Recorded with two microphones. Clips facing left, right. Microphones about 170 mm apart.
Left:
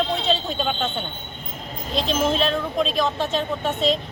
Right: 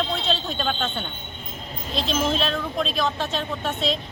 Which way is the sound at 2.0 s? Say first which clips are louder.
Left 2 dB; 45° left (ahead or behind).